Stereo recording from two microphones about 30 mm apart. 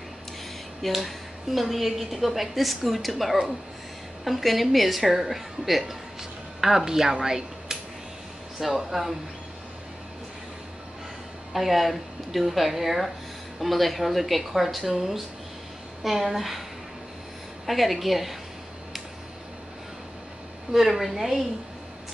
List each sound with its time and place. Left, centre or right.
0.8 s a woman's voice: centre
8.5 s a woman's voice: centre
11.5 s a woman's voice: centre
13.6 s a woman's voice: centre
17.6 s a woman's voice: centre
20.7 s speech: centre